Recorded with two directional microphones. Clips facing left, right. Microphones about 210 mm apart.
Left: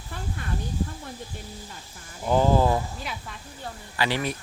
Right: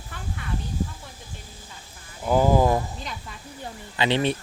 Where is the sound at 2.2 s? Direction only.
10° right (ahead or behind).